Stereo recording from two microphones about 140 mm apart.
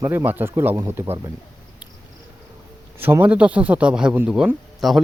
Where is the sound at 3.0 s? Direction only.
15° right (ahead or behind).